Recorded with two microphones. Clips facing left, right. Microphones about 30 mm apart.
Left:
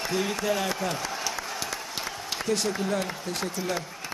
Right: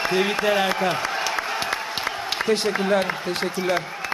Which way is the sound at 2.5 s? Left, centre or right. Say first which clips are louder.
Right 6 dB; right.